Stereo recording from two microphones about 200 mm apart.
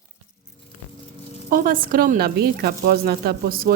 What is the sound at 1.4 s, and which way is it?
Speech, 45° right (ahead or behind).